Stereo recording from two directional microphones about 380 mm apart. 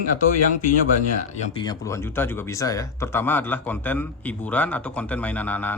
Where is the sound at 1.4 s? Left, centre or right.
Centre.